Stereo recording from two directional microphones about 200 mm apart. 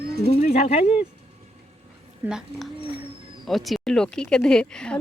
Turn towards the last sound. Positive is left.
turn(degrees=5)  # may be behind; listen again after turning